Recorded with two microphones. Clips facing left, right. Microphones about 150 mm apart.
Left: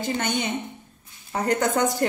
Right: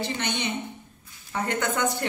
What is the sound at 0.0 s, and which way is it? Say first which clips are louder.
A woman's voice: left 3 dB; 45° left (ahead or behind).